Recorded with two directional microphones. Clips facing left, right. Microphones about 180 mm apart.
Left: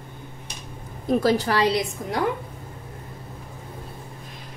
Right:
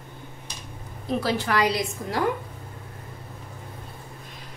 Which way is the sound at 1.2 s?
40° left (ahead or behind).